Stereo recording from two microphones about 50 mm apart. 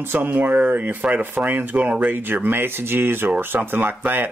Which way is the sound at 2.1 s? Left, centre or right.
Right.